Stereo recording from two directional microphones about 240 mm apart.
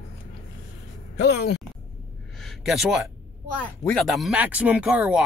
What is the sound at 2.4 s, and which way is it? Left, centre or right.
Speech, centre.